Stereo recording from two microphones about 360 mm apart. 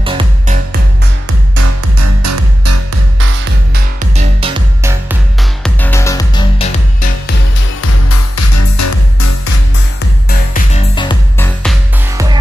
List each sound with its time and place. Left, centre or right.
0.0 s music: centre
2.0 s music: right
4.2 s music: centre
5.6 s music: centre
8.1 s music: left
10.3 s music: left